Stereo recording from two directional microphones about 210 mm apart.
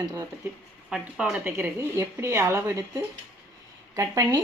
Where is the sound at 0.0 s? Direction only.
15° right (ahead or behind).